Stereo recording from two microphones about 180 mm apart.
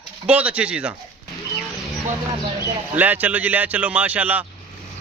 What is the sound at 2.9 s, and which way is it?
A man's voice, 10° right (ahead or behind).